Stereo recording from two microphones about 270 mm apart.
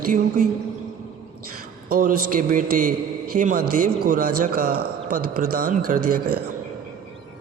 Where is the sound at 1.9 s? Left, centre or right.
Right.